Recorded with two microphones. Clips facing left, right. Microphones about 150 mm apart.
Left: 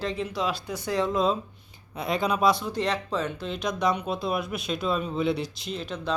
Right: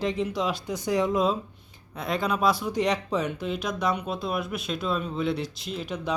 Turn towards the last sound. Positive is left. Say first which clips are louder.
# even
turn(degrees=-10)  # may be behind; listen again after turning